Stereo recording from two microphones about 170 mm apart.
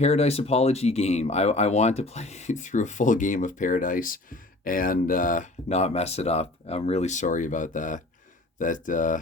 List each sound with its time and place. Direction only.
0.0 s speech: 40° left (ahead or behind)